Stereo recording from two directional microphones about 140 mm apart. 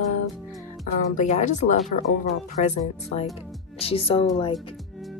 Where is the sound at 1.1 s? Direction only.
60° left (ahead or behind).